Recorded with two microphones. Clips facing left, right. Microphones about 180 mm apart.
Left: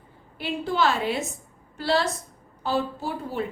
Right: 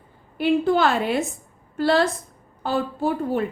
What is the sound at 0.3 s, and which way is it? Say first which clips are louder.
A woman's voice: right 7 dB; 55° right (ahead or behind).